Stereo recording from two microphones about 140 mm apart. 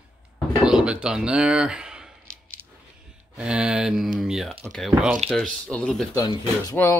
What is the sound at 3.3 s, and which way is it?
Speech, 5° right (ahead or behind).